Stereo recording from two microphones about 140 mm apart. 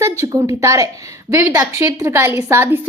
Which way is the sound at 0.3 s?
25° right (ahead or behind).